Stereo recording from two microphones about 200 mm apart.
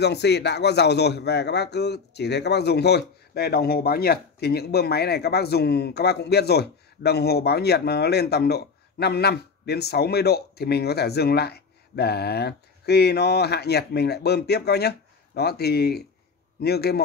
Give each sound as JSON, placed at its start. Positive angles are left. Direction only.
{"t": 0.0, "sound": "a man's voice", "side_deg": 55}